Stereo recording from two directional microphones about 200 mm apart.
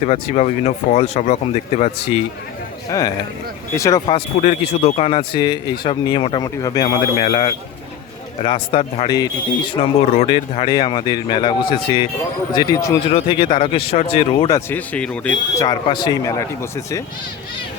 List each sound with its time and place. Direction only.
0.0 s speech: 35° left (ahead or behind)
2.9 s speech: 15° left (ahead or behind)
7.2 s speech: 30° left (ahead or behind)
14.7 s speech: 5° left (ahead or behind)
15.6 s speech: 20° left (ahead or behind)